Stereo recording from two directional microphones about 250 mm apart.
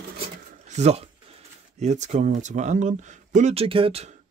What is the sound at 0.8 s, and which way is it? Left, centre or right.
Speech, right.